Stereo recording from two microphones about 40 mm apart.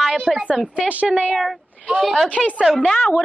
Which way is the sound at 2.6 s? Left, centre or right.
Centre.